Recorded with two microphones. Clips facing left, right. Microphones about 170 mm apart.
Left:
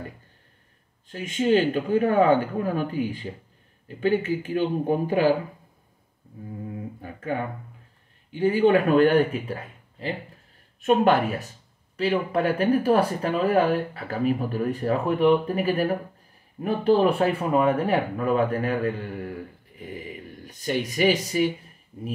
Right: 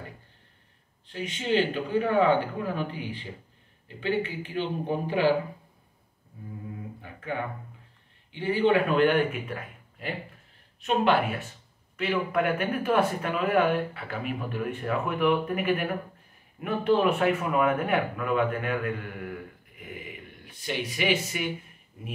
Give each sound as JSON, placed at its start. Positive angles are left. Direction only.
{"t": 1.0, "sound": "speech", "side_deg": 45}
{"t": 7.0, "sound": "speech", "side_deg": 40}
{"t": 10.8, "sound": "speech", "side_deg": 45}
{"t": 12.0, "sound": "speech", "side_deg": 30}